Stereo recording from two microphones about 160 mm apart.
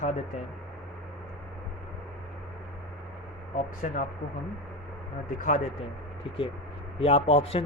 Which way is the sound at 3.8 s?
50° left (ahead or behind).